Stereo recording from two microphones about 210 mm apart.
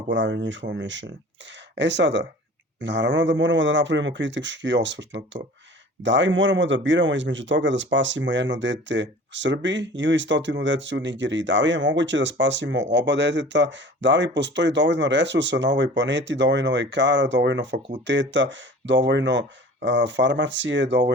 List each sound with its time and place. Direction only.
0.1 s speech: 60° right (ahead or behind)